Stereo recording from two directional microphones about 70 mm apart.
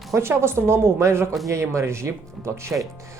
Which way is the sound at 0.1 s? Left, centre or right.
Right.